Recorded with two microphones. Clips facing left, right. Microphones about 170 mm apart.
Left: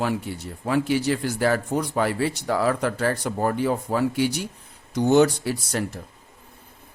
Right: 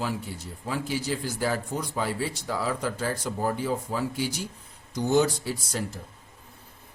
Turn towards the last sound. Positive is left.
turn(degrees=65)  # may be behind; listen again after turning